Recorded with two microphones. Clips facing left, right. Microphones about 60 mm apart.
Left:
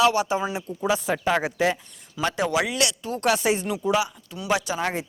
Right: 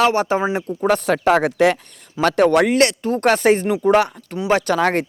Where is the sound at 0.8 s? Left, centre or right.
Right.